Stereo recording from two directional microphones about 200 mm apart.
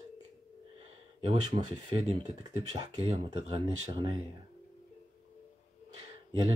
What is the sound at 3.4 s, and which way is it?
Speech, 20° right (ahead or behind).